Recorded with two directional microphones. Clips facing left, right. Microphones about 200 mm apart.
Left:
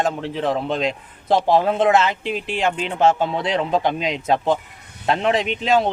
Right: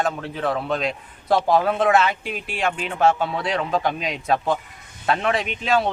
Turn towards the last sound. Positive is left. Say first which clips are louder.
# left 3 dB
turn(degrees=20)  # may be behind; listen again after turning